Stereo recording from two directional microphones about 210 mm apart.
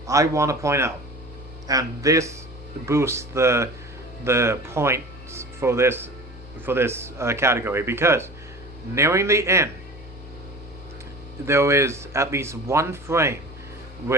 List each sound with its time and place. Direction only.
0.1 s speech: 15° right (ahead or behind)
11.4 s speech: 15° right (ahead or behind)